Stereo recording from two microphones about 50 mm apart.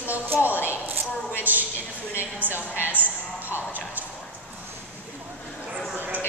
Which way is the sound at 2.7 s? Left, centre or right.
Right.